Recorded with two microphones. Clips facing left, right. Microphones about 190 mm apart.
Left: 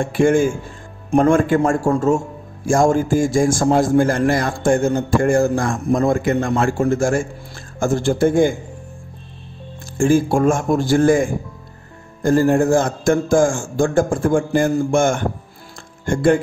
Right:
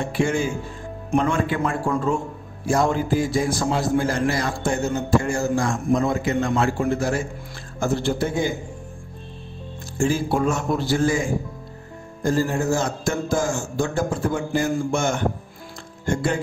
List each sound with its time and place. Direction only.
0.0 s a man's voice: 50° left (ahead or behind)
9.9 s a man's voice: 50° left (ahead or behind)